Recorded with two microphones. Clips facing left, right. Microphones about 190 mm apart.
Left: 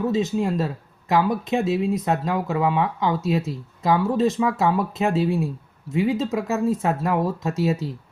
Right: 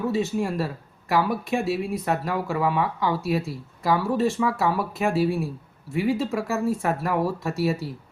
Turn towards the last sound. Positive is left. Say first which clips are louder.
# left 2 dB
turn(degrees=20)  # may be behind; listen again after turning